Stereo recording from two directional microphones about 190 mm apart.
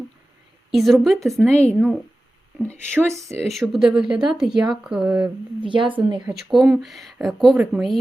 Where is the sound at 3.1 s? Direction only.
15° right (ahead or behind).